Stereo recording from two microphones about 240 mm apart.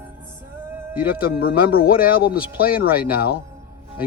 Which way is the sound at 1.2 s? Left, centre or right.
Left.